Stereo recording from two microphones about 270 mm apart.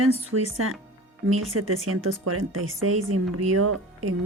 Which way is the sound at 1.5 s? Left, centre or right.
Right.